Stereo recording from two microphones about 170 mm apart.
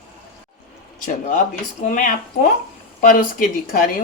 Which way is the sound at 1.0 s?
50° left (ahead or behind).